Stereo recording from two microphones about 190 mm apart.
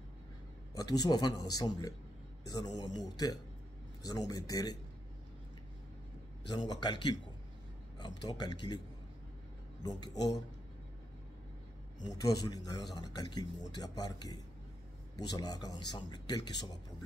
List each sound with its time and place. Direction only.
0.7 s a man's voice: 20° left (ahead or behind)
6.7 s speech: 20° left (ahead or behind)
9.8 s speech: 20° left (ahead or behind)
12.0 s speech: 20° left (ahead or behind)